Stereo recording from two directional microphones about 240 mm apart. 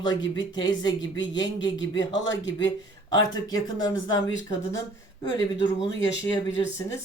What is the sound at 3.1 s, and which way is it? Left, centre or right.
Speech, centre.